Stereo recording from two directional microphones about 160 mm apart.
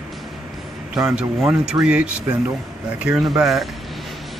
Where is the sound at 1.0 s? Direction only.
5° right (ahead or behind).